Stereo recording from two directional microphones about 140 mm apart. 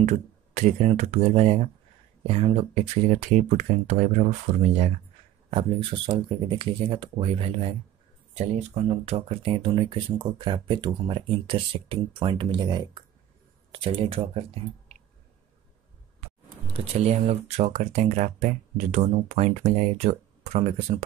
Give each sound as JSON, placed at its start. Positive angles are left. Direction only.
{"t": 0.0, "sound": "speech", "side_deg": -55}
{"t": 5.5, "sound": "speech", "side_deg": -45}
{"t": 16.7, "sound": "speech", "side_deg": -50}